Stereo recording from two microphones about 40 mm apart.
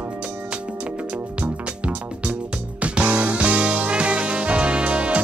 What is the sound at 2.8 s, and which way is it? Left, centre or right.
Music, right.